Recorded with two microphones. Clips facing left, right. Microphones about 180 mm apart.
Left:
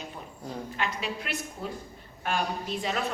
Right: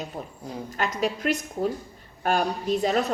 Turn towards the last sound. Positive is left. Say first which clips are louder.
# right 8 dB
turn(degrees=-40)  # may be behind; listen again after turning